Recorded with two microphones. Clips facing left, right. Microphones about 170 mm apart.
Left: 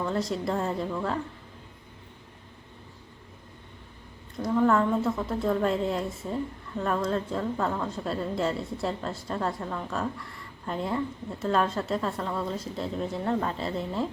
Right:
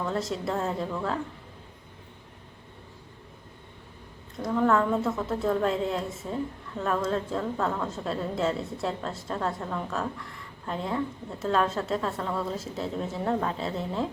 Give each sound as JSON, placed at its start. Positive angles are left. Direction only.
{"t": 0.0, "sound": "a woman's voice", "side_deg": 0}
{"t": 4.4, "sound": "a woman's voice", "side_deg": 0}